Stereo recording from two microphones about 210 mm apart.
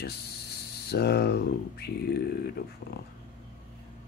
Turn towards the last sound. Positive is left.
turn(degrees=50)  # may be behind; listen again after turning